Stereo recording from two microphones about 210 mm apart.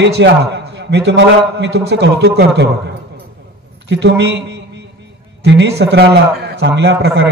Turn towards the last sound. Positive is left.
turn(degrees=-55)  # may be behind; listen again after turning